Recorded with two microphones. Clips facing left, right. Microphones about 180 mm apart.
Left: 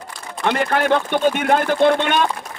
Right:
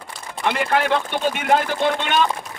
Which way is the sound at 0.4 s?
45° left (ahead or behind).